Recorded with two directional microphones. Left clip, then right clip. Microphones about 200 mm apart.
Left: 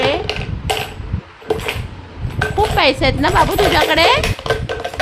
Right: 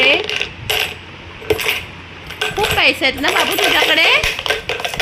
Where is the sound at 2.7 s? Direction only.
10° left (ahead or behind).